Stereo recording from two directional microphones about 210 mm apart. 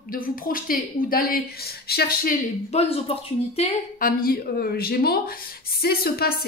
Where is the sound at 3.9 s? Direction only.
45° left (ahead or behind).